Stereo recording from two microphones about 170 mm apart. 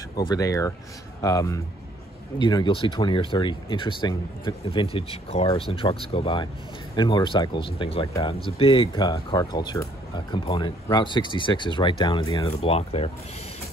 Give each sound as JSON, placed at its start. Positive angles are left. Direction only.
{"t": 0.1, "sound": "speech", "side_deg": 25}
{"t": 12.5, "sound": "speech", "side_deg": 35}